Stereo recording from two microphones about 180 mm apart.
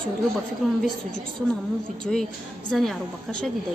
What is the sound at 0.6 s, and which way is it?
Speech, centre (ahead or behind).